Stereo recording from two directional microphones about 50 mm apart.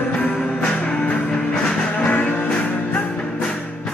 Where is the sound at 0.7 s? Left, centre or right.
Left.